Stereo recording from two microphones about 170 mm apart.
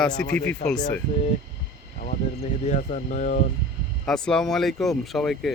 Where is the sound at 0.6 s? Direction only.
45° left (ahead or behind).